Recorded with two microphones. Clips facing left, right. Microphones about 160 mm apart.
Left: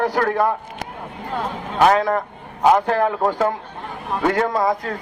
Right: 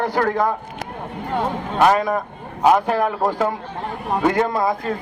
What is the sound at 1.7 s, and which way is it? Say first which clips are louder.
A man's voice: left 1 dB; 10° right (ahead or behind).